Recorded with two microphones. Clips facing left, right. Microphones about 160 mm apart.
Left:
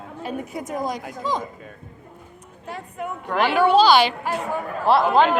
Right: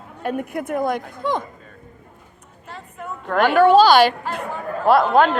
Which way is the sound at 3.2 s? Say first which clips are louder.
Right 5 dB; 50° right (ahead or behind).